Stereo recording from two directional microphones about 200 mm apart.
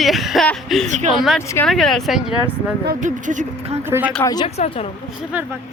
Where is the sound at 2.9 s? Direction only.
40° right (ahead or behind).